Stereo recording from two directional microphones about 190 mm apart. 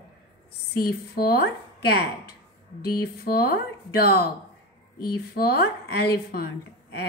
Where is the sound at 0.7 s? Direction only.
55° left (ahead or behind).